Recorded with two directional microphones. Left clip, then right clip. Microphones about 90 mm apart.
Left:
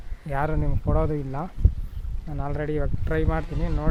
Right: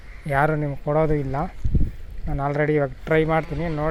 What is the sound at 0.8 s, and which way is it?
Speech, 5° left (ahead or behind).